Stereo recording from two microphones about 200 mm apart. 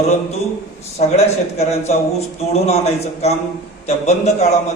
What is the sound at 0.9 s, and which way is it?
A man's voice, 30° left (ahead or behind).